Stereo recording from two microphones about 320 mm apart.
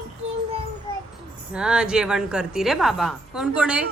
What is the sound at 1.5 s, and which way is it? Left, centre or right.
Speech, centre.